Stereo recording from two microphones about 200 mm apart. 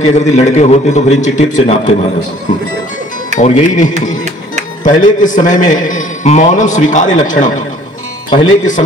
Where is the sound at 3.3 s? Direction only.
35° left (ahead or behind).